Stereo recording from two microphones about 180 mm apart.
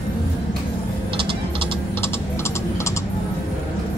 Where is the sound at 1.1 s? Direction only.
30° right (ahead or behind).